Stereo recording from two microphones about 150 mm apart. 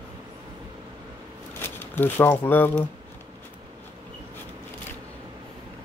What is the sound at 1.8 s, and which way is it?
Speech, 15° left (ahead or behind).